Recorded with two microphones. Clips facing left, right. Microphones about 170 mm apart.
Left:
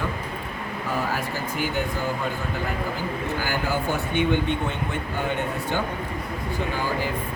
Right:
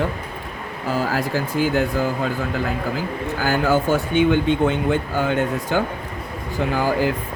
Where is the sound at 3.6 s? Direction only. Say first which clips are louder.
Right 7 dB; 90° right.